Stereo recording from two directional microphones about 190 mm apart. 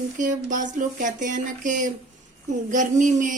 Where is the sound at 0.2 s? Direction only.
40° right (ahead or behind).